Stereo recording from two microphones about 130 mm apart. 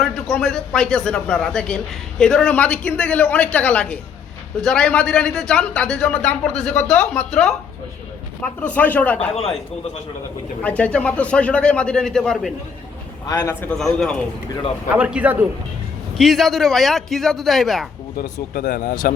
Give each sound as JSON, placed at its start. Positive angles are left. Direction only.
{"t": 0.0, "sound": "a man's voice", "side_deg": 5}
{"t": 10.6, "sound": "a man's voice", "side_deg": 10}
{"t": 13.2, "sound": "a man's voice", "side_deg": 30}
{"t": 13.5, "sound": "a man's voice", "side_deg": 15}
{"t": 13.7, "sound": "a man's voice", "side_deg": 5}
{"t": 14.9, "sound": "a man's voice", "side_deg": -10}
{"t": 16.1, "sound": "a man's voice", "side_deg": 0}
{"t": 18.6, "sound": "speech", "side_deg": 90}